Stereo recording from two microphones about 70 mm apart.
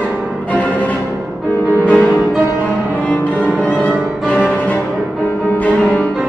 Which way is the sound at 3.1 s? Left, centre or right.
Left.